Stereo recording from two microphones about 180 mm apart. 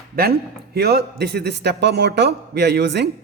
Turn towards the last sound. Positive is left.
turn(degrees=-70)  # may be behind; listen again after turning